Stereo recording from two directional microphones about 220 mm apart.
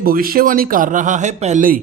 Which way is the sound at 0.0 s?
40° right (ahead or behind).